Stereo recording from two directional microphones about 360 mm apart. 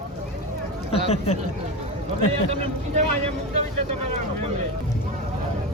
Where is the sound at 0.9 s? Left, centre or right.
Centre.